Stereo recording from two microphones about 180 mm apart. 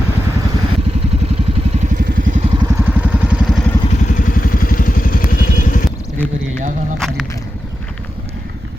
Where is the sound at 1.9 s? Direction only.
75° right (ahead or behind).